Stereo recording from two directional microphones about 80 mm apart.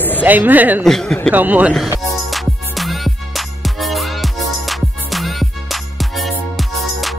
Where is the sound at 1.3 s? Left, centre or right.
Right.